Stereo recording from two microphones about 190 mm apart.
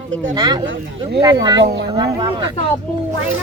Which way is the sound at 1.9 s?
20° right (ahead or behind).